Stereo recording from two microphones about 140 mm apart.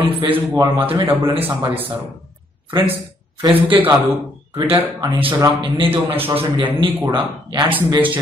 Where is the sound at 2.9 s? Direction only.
15° right (ahead or behind).